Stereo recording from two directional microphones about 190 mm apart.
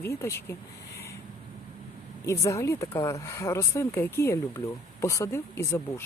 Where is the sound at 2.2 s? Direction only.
15° left (ahead or behind).